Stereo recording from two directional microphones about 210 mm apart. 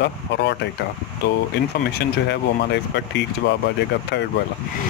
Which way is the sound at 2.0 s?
55° left (ahead or behind).